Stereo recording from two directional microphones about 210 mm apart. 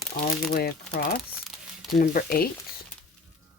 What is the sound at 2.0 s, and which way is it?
Speech, 45° left (ahead or behind).